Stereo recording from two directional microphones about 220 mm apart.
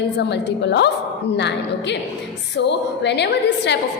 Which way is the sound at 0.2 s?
50° left (ahead or behind).